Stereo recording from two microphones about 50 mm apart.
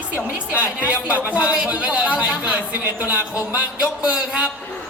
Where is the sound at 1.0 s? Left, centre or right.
Right.